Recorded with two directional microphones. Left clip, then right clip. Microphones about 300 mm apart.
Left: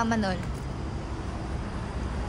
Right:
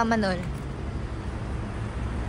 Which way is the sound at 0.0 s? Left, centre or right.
Centre.